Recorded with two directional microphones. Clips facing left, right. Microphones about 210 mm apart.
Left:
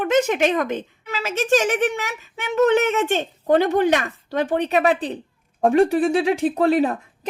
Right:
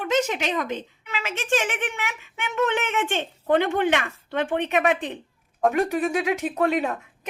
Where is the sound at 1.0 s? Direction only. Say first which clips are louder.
Left 7 dB; 40° left (ahead or behind).